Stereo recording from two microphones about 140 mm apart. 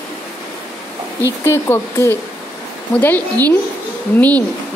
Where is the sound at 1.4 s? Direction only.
20° left (ahead or behind).